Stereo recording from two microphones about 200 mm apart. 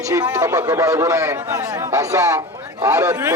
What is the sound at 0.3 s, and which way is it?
A man's voice, 15° right (ahead or behind).